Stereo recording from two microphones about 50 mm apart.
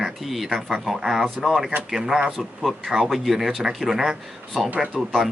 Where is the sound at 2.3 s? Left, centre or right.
Centre.